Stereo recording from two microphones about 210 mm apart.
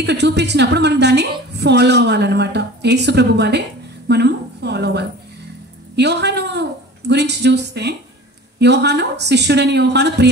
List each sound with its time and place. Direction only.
0.0 s a woman's voice: 55° right (ahead or behind)